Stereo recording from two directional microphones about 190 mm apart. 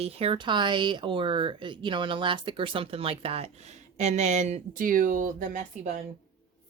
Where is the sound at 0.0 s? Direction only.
30° right (ahead or behind).